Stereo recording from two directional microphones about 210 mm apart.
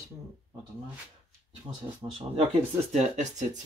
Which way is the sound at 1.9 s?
15° right (ahead or behind).